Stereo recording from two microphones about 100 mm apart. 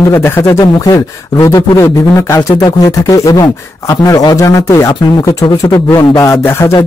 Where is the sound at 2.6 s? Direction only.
35° left (ahead or behind).